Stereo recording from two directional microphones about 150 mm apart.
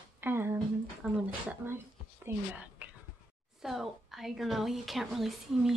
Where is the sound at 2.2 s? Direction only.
10° right (ahead or behind).